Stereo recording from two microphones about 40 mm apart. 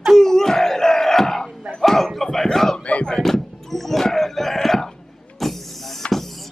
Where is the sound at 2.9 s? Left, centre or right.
Left.